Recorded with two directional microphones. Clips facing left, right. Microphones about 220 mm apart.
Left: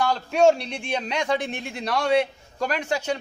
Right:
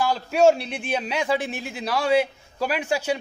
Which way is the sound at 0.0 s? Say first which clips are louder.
Right 1 dB; 5° right (ahead or behind).